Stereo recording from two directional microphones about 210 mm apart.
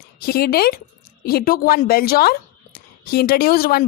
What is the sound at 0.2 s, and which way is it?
A child's voice, 45° left (ahead or behind).